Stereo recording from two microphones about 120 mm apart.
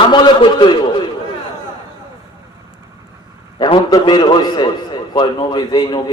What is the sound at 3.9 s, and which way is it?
A man's voice, 35° left (ahead or behind).